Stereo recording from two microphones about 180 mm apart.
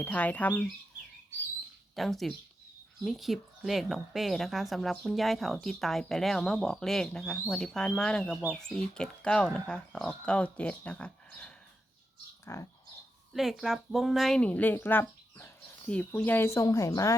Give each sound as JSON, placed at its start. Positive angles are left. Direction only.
{"t": 0.0, "sound": "speech", "side_deg": 10}
{"t": 2.0, "sound": "speech", "side_deg": 0}
{"t": 13.3, "sound": "speech", "side_deg": 0}